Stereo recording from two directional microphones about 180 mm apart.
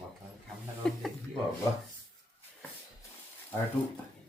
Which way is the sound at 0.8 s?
5° left (ahead or behind).